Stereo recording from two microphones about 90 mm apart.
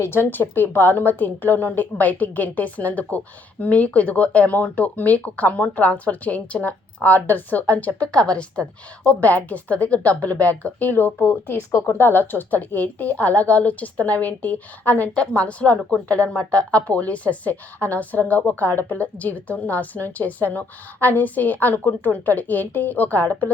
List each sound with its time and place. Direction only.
0.0 s a woman's voice: 25° left (ahead or behind)